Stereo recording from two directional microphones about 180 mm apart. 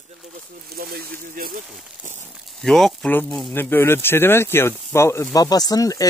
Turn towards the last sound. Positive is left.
turn(degrees=20)  # may be behind; listen again after turning